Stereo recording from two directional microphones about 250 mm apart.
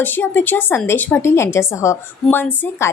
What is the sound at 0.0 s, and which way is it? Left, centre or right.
A woman's voice, centre.